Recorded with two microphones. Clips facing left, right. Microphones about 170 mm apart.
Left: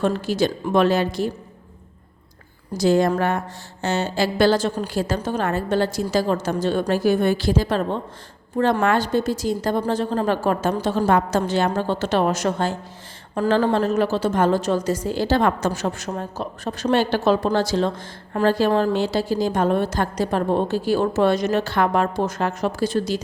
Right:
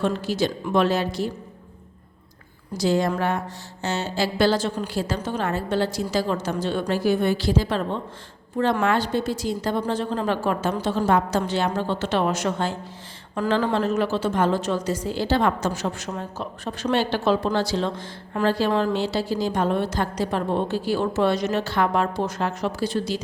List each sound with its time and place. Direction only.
0.0 s a woman's voice: 50° left (ahead or behind)
2.7 s a woman's voice: 50° left (ahead or behind)
8.8 s a woman's voice: 45° left (ahead or behind); by 13.7 s 30° left (ahead or behind)
13.7 s a woman's voice: 40° left (ahead or behind)